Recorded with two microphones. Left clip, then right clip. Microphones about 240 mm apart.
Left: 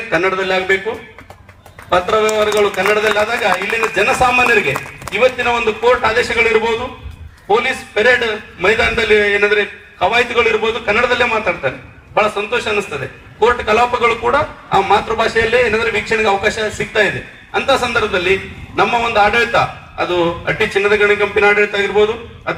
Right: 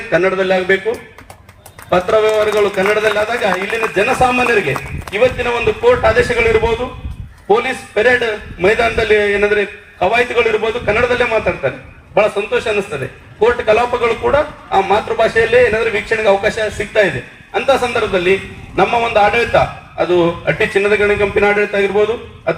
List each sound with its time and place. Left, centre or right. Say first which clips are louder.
0.1 s a man's voice: right 2 dB; left
1.9 s a man's voice: right 1 dB; left